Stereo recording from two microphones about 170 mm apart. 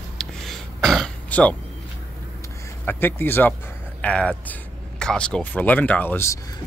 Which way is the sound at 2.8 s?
10° left (ahead or behind).